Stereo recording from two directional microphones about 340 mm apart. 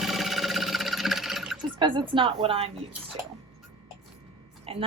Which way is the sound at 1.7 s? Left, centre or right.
Centre.